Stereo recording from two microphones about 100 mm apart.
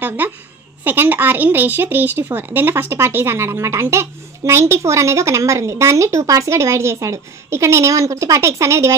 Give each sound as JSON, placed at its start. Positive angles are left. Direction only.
{"t": 0.8, "sound": "a woman's voice", "side_deg": -20}